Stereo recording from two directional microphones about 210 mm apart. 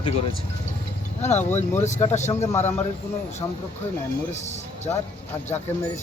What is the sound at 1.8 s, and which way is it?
Speech, 35° left (ahead or behind).